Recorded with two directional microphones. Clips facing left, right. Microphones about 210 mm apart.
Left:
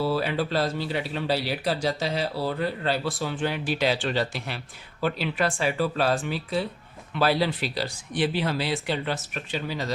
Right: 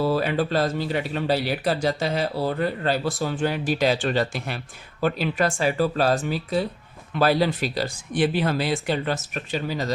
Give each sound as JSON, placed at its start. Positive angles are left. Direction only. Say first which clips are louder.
{"t": 0.0, "sound": "speech", "louder": "right 3 dB", "side_deg": -50}